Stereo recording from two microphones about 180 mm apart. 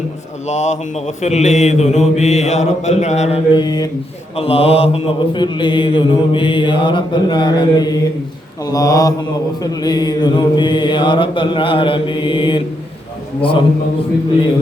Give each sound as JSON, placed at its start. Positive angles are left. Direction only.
{"t": 0.4, "sound": "mantra", "side_deg": 40}
{"t": 4.4, "sound": "mantra", "side_deg": 35}